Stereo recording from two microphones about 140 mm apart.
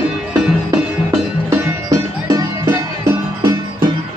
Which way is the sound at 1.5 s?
20° right (ahead or behind).